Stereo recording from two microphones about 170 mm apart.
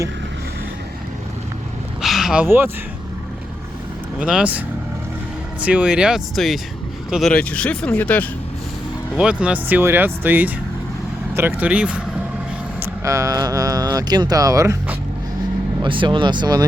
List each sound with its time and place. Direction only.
2.0 s a sound: centre (ahead or behind)
4.2 s speech: 5° right (ahead or behind); by 8.3 s 10° left (ahead or behind)
9.1 s speech: 5° right (ahead or behind)
12.8 s speech: 20° right (ahead or behind)
15.8 s speech: 30° right (ahead or behind)